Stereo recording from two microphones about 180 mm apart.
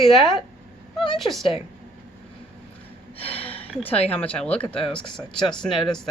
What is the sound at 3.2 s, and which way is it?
Gasp, 30° left (ahead or behind).